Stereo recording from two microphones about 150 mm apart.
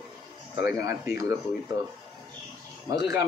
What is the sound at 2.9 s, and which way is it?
Speech, 20° right (ahead or behind).